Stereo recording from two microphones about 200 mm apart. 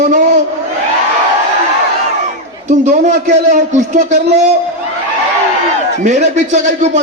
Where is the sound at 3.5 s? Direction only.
35° right (ahead or behind).